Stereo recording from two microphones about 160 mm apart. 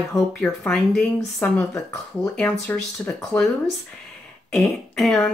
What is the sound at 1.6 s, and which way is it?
Speech, 20° left (ahead or behind).